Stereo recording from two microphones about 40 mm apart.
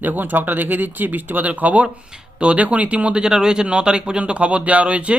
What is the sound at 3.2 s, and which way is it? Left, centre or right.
Speech, centre.